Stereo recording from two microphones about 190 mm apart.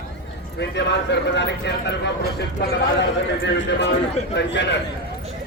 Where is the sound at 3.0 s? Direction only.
70° left (ahead or behind).